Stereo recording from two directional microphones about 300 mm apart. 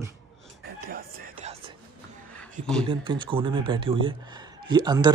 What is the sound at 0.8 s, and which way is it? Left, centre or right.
Music, right.